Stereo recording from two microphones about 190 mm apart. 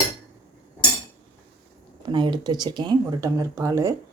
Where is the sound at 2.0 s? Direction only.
25° right (ahead or behind).